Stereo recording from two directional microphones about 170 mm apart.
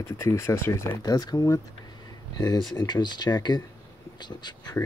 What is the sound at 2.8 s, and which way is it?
Speech, 25° left (ahead or behind).